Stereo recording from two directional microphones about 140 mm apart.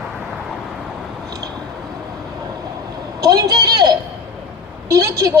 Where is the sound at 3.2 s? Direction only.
25° right (ahead or behind).